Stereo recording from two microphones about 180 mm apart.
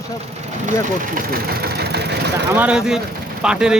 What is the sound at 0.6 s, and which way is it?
Speech, 45° right (ahead or behind).